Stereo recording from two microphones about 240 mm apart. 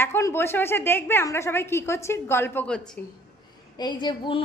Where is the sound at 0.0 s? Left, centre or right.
Centre.